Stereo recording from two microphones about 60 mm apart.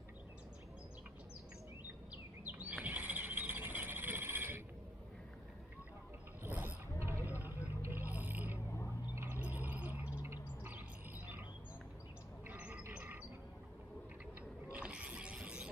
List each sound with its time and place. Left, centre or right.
2.4 s bird: right
6.4 s a sound: right
7.0 s vehicle: right
8.0 s a sound: right
9.6 s bird: right
10.3 s bird: right
12.5 s bird: right
12.9 s a sound: right
14.7 s mechanisms: centre